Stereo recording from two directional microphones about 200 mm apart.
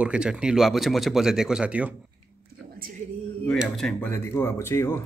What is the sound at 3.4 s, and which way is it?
Speech, centre (ahead or behind).